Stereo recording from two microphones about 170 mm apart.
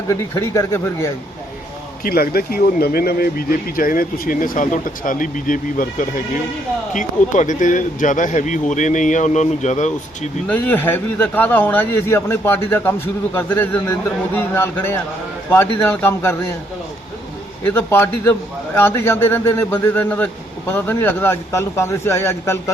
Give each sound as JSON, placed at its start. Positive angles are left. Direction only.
{"t": 0.1, "sound": "a man's voice", "side_deg": 15}
{"t": 2.0, "sound": "speech", "side_deg": 60}
{"t": 10.4, "sound": "a man's voice", "side_deg": 10}
{"t": 17.6, "sound": "a man's voice", "side_deg": 10}